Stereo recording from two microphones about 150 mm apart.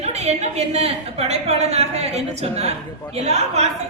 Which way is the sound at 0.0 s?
45° right (ahead or behind).